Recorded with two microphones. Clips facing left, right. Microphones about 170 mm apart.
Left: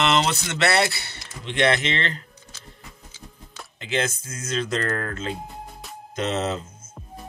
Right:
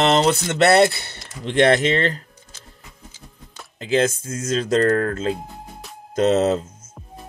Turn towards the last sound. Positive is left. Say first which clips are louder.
# right 8 dB
turn(degrees=-40)  # may be behind; listen again after turning